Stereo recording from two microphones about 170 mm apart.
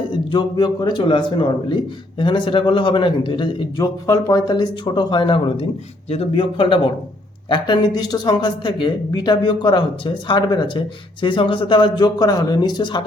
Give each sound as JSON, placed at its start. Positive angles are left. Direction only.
{"t": 0.1, "sound": "a man's voice", "side_deg": 25}